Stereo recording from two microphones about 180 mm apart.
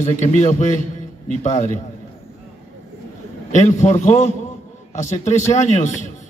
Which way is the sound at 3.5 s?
40° left (ahead or behind).